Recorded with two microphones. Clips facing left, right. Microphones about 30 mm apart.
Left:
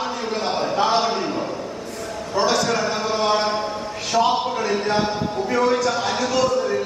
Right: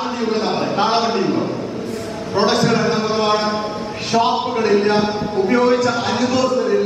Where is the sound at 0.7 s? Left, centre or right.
Right.